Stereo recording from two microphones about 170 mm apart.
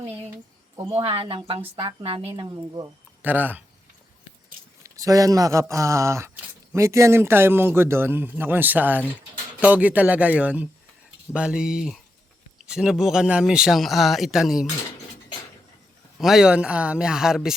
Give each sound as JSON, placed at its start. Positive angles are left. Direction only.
{"t": 0.9, "sound": "speech", "side_deg": -35}
{"t": 3.2, "sound": "speech", "side_deg": -10}
{"t": 4.8, "sound": "a man's voice", "side_deg": -20}
{"t": 16.1, "sound": "a man's voice", "side_deg": 0}